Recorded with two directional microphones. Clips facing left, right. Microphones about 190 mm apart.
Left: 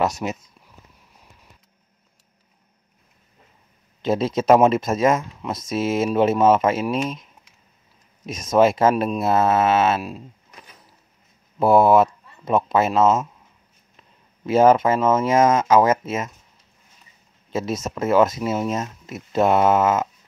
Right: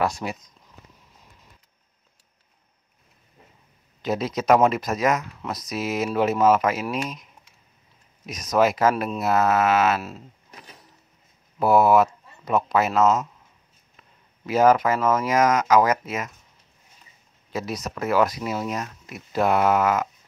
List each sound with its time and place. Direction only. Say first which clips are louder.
0.0 s speech: left 3 dB; 20° left (ahead or behind)
4.0 s speech: left 4 dB; 25° left (ahead or behind)
8.3 s speech: left 4 dB; 25° left (ahead or behind)
11.6 s speech: left 3 dB; 25° left (ahead or behind)
14.4 s speech: left 3 dB; 25° left (ahead or behind)
17.5 s speech: left 4 dB; 25° left (ahead or behind)